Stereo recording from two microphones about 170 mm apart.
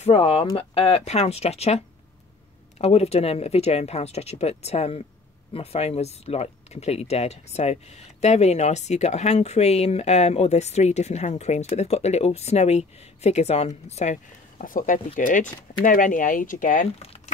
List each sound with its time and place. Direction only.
0.0 s speech: 35° left (ahead or behind)
2.8 s speech: 40° left (ahead or behind)
16.8 s speech: 35° left (ahead or behind)